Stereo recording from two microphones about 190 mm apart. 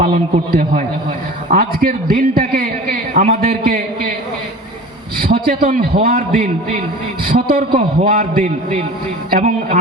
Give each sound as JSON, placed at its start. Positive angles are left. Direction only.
{"t": 0.0, "sound": "a man's voice", "side_deg": -50}
{"t": 5.1, "sound": "a man's voice", "side_deg": -50}